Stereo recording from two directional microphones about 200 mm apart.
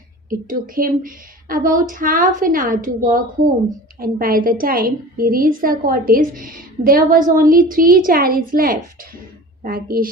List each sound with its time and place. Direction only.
0.3 s a woman's voice: 45° right (ahead or behind)